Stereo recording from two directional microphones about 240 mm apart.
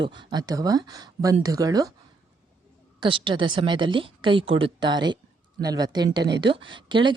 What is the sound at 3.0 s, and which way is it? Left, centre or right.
A woman's voice, right.